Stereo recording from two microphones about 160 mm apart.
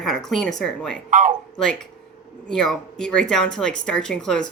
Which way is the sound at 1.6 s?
5° left (ahead or behind).